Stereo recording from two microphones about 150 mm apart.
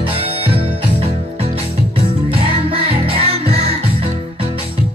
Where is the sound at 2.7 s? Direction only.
40° right (ahead or behind).